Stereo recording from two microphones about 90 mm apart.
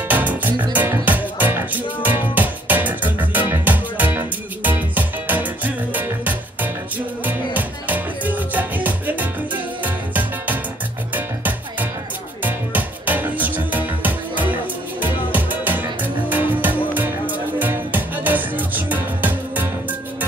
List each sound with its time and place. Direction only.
0.1 s music: 20° right (ahead or behind)